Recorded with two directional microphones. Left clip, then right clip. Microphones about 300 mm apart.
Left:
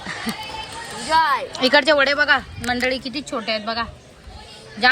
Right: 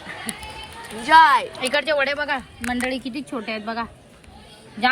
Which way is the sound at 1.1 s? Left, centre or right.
Right.